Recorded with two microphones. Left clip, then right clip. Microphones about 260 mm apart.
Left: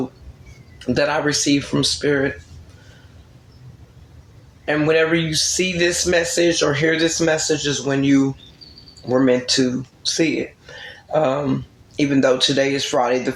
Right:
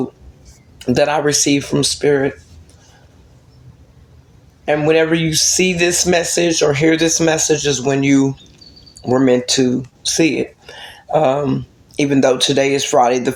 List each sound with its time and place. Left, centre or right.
0.9 s speech: right
4.6 s speech: right